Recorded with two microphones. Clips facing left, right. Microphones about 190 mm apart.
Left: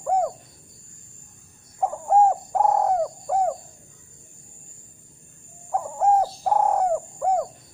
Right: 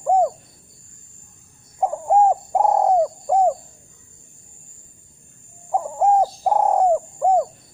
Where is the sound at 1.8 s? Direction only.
15° right (ahead or behind).